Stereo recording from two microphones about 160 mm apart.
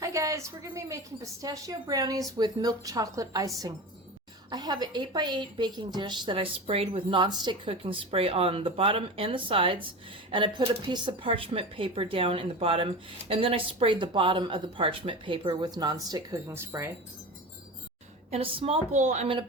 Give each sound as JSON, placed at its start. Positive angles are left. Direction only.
{"t": 0.0, "sound": "a woman's voice", "side_deg": -20}
{"t": 18.3, "sound": "speech", "side_deg": -35}